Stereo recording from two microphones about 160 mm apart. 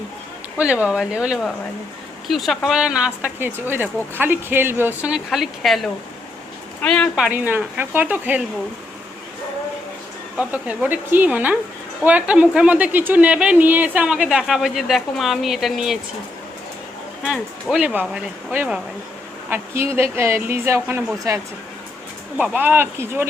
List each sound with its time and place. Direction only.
0.6 s a woman's voice: 5° right (ahead or behind)
7.3 s a woman's voice: 10° right (ahead or behind)
10.3 s a woman's voice: 10° right (ahead or behind)
17.2 s a woman's voice: 5° right (ahead or behind)
22.4 s a woman's voice: 10° right (ahead or behind)